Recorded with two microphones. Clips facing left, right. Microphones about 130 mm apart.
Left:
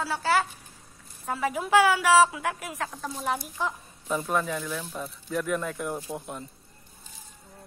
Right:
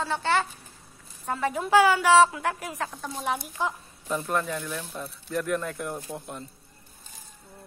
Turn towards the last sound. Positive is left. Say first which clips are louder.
# left 1 dB
turn(degrees=5)  # may be behind; listen again after turning